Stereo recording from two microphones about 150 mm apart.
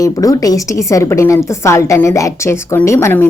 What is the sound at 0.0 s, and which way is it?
A woman's voice, 25° left (ahead or behind).